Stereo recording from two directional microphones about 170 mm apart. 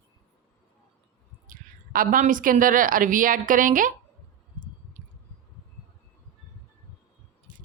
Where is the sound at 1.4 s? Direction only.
55° right (ahead or behind).